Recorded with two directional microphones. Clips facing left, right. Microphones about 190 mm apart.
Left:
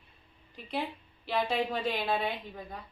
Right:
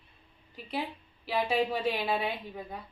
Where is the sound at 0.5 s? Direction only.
5° right (ahead or behind).